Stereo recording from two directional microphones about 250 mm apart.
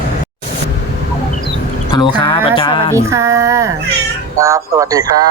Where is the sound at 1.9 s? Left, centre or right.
Centre.